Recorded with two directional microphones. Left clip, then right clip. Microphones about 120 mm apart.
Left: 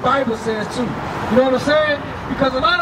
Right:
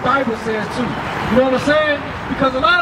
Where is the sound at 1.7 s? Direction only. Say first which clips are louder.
Right 1 dB; 10° left (ahead or behind).